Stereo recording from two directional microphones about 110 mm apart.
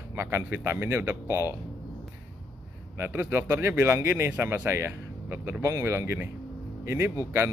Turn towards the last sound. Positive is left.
turn(degrees=-25)  # may be behind; listen again after turning